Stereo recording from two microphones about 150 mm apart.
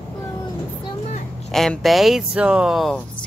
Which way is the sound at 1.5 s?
Centre (ahead or behind).